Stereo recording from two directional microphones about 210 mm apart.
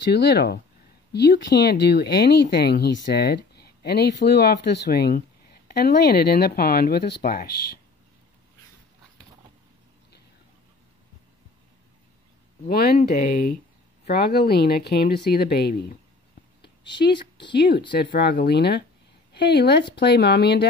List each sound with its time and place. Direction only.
0.1 s speech: 50° left (ahead or behind)
12.6 s speech: 45° left (ahead or behind)
17.1 s speech: 20° left (ahead or behind)
17.6 s speech: 55° left (ahead or behind)